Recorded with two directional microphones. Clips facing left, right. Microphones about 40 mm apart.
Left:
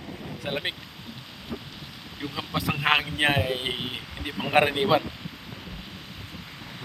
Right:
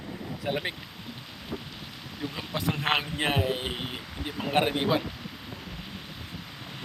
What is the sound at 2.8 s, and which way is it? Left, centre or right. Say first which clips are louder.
Speech: left 6 dB; left.